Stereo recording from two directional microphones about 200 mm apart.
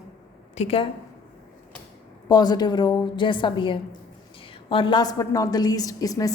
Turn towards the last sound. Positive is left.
turn(degrees=15)  # may be behind; listen again after turning